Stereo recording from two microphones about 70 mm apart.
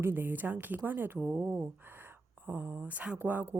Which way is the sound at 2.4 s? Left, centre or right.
Right.